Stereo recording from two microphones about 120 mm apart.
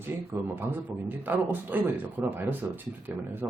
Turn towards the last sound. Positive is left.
turn(degrees=-15)  # may be behind; listen again after turning